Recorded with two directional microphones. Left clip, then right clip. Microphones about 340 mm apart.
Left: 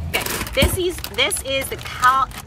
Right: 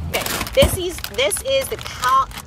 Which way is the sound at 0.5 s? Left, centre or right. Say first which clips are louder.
Right 3 dB; centre.